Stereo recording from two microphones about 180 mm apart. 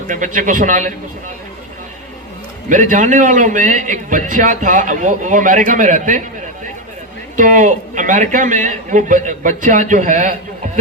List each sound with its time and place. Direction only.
0.1 s a man's voice: 45° right (ahead or behind)
2.6 s a man's voice: 45° right (ahead or behind)
7.3 s a man's voice: 45° right (ahead or behind)